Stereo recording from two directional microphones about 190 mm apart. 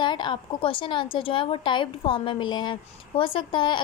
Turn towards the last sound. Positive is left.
turn(degrees=25)  # may be behind; listen again after turning